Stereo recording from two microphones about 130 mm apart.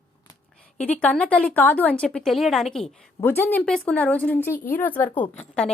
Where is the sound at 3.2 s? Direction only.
15° left (ahead or behind).